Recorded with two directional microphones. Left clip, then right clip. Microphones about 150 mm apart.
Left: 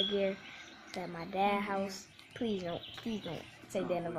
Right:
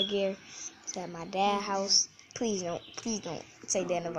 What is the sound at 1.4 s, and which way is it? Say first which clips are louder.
A woman's voice: right 4 dB; 10° right (ahead or behind).